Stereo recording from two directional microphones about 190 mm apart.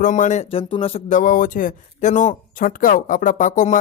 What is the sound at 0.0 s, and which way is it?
A man's voice, 40° left (ahead or behind).